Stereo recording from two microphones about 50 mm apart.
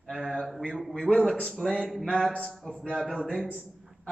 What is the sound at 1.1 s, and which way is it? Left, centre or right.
Speech, left.